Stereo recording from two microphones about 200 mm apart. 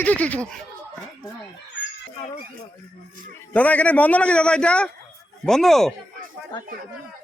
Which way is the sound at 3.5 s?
5° left (ahead or behind).